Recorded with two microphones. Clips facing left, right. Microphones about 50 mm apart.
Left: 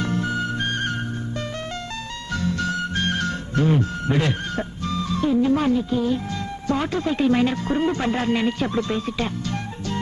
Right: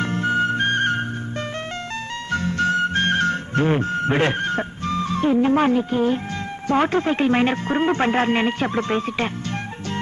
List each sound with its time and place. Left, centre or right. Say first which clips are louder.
0.0 s flute: right 4 dB; right
2.3 s music: right 4 dB; right
6.7 s speech: right 4 dB; right